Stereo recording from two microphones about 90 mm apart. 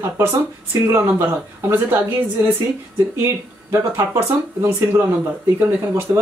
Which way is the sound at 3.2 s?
30° right (ahead or behind).